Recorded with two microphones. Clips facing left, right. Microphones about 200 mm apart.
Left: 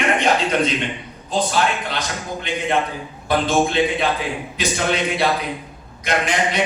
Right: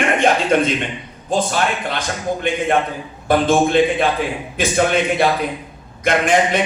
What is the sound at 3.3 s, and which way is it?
A man's voice, 50° right (ahead or behind).